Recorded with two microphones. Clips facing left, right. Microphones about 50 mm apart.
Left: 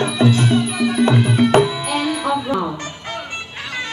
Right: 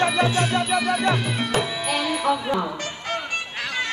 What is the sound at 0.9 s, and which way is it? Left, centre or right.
Music, left.